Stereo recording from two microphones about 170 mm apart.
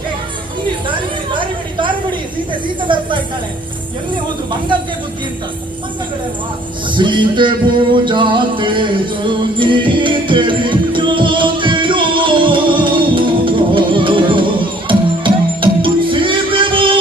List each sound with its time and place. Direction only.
0.9 s a sound: 30° right (ahead or behind)
2.8 s music: 30° right (ahead or behind)
6.9 s music: 30° right (ahead or behind)